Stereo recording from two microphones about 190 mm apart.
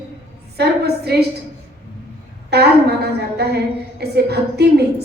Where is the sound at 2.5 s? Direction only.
60° right (ahead or behind).